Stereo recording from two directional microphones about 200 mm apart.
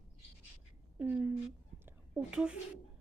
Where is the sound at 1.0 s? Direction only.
10° right (ahead or behind).